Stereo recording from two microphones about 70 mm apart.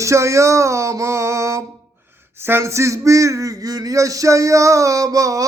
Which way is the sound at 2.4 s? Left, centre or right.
Right.